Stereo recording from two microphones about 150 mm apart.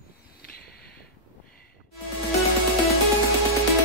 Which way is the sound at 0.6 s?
90° left.